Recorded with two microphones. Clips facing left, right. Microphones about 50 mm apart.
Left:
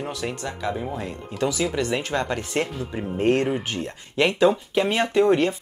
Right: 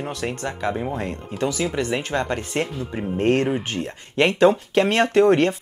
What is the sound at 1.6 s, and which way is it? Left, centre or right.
Speech, centre.